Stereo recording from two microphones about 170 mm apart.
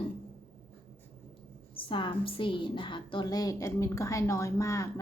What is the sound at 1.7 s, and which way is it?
A woman's voice, 30° left (ahead or behind).